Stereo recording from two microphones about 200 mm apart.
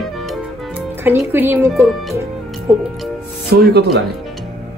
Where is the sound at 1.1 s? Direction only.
10° right (ahead or behind).